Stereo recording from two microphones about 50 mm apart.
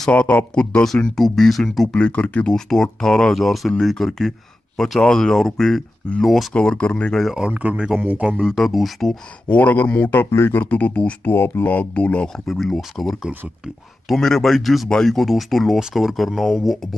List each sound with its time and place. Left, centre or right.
0.1 s speech: left
0.8 s speech: centre
2.0 s speech: left
2.5 s speech: centre
6.5 s speech: centre
7.7 s speech: centre
8.0 s speech: right
8.5 s speech: centre
9.5 s speech: left
10.3 s speech: left
10.6 s speech: left
11.2 s speech: left
11.6 s speech: left
12.3 s speech: centre